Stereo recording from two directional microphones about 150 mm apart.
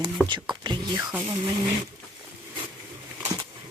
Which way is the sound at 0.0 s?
30° right (ahead or behind).